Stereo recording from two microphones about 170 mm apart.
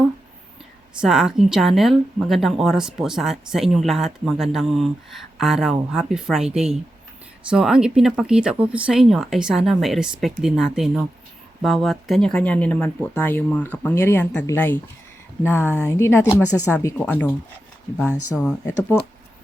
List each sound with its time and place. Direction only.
0.9 s speech: 5° right (ahead or behind)
18.4 s speech: 10° left (ahead or behind)